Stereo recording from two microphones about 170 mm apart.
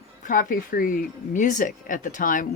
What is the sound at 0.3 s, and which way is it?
Speech, 55° left (ahead or behind).